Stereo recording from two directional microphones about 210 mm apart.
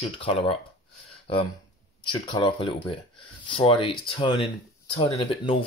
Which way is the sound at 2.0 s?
25° left (ahead or behind).